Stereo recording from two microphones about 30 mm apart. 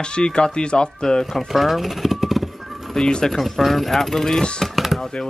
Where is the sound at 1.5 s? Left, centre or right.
Centre.